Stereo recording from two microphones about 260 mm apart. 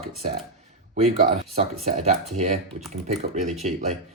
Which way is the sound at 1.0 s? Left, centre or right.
Right.